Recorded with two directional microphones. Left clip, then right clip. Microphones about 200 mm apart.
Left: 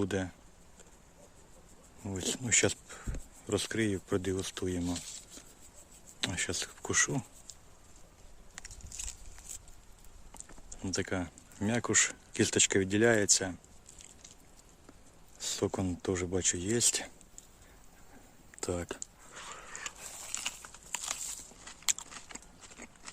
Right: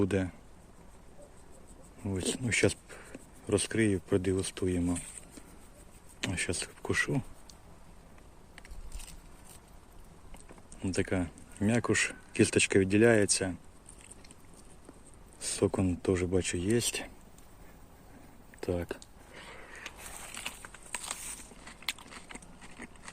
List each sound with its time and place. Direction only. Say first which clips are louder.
0.0 s speech: right 3 dB; 5° left (ahead or behind)
2.0 s speech: right 1 dB; 5° left (ahead or behind)
6.1 s speech: even; 10° left (ahead or behind)
8.5 s a sound: left 6 dB; 25° left (ahead or behind)
10.8 s speech: right 3 dB; 5° left (ahead or behind)
15.4 s speech: right 3 dB; centre (ahead or behind)
18.6 s speech: right 2 dB; 15° left (ahead or behind)
19.5 s a sound: left 2 dB; 15° left (ahead or behind)
20.3 s crumpling: left 3 dB; centre (ahead or behind)
21.6 s biting: left 3 dB; centre (ahead or behind)